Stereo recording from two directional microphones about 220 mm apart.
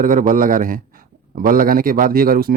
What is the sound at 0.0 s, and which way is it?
A man's voice, 40° right (ahead or behind).